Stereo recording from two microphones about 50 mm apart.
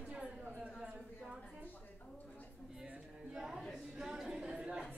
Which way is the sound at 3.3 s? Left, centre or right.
Centre.